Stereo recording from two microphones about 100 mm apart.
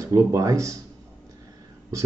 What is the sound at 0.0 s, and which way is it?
Speech, 35° right (ahead or behind).